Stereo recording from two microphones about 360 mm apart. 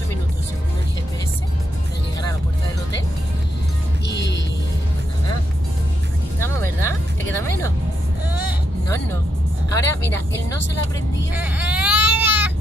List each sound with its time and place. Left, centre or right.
4.1 s music: left
6.5 s music: centre
8.3 s vehicle: centre
9.7 s vehicle: centre
11.3 s baby cry: centre